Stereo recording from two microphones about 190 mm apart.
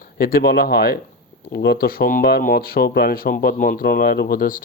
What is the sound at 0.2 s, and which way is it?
Speech, 50° left (ahead or behind).